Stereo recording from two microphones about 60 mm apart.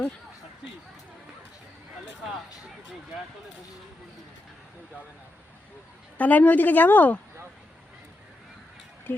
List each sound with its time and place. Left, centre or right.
6.1 s a woman's voice: left
9.1 s speech: left